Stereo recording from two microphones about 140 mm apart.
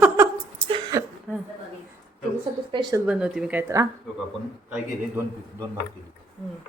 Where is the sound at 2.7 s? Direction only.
30° right (ahead or behind).